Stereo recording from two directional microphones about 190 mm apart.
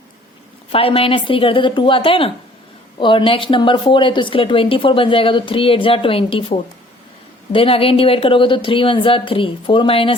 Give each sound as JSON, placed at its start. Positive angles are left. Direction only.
{"t": 0.7, "sound": "a woman's voice", "side_deg": 30}